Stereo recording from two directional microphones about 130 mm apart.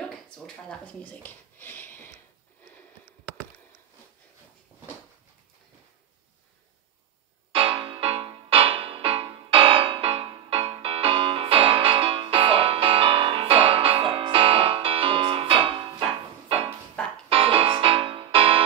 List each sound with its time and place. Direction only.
0.7 s speech: 10° left (ahead or behind)
7.5 s music: 45° right (ahead or behind)
17.0 s music: 10° left (ahead or behind)
17.3 s music: 45° right (ahead or behind)